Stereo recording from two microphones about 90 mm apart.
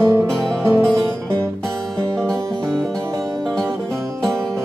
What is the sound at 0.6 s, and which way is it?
Music, 30° right (ahead or behind).